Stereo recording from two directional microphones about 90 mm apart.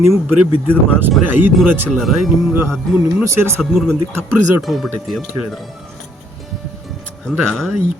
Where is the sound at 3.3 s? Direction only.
30° right (ahead or behind).